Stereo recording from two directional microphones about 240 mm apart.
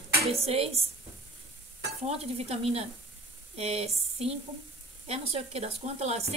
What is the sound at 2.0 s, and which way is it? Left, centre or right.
A woman's voice, right.